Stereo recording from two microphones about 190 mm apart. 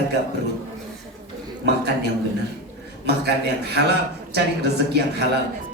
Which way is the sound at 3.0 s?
60° right (ahead or behind).